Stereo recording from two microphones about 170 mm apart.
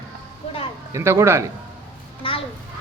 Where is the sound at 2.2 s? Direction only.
30° left (ahead or behind).